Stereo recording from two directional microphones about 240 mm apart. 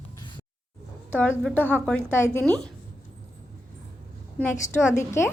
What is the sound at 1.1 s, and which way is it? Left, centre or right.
A woman's voice, centre.